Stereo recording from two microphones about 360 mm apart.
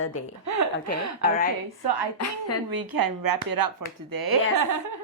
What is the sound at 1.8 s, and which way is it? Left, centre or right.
Speech, right.